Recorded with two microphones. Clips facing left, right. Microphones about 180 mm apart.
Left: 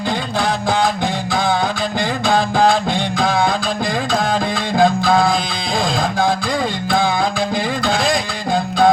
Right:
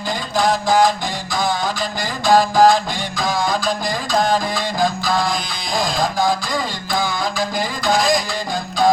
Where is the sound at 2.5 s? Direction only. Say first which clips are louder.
Right 1 dB; 60° left (ahead or behind).